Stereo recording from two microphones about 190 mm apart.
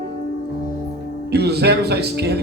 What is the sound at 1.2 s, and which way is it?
A man's voice, 60° right (ahead or behind).